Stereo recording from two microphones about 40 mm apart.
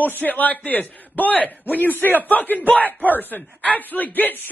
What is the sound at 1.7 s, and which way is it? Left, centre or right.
A man's voice, left.